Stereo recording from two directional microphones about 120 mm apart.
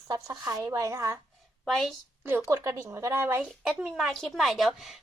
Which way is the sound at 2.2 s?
20° right (ahead or behind).